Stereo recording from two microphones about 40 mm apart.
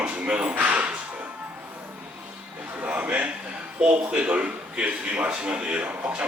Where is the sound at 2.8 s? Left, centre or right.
Right.